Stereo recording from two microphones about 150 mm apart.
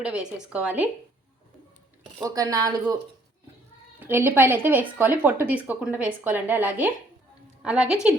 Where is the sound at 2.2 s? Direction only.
25° right (ahead or behind).